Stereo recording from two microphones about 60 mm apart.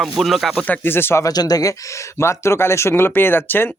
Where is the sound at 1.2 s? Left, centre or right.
Left.